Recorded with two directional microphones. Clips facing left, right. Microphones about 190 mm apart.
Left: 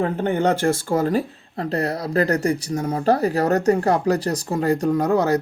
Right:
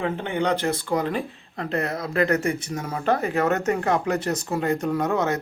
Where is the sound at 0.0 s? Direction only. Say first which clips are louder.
Left 5 dB; 40° left (ahead or behind).